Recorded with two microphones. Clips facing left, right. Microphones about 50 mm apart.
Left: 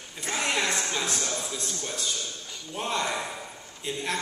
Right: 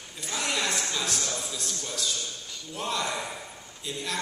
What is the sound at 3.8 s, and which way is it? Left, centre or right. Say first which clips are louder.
Speech: left 3 dB; left.